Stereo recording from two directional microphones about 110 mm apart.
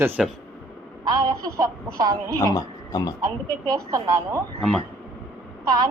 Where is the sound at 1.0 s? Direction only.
35° right (ahead or behind).